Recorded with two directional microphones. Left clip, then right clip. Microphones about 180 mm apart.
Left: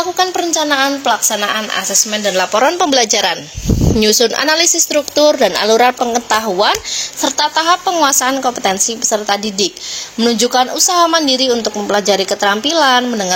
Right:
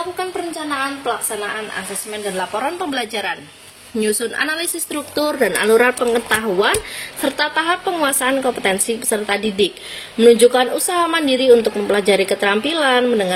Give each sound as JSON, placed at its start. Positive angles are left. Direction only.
{"t": 0.2, "sound": "a woman's voice", "side_deg": 60}
{"t": 2.3, "sound": "speech", "side_deg": 50}
{"t": 10.4, "sound": "speech", "side_deg": 35}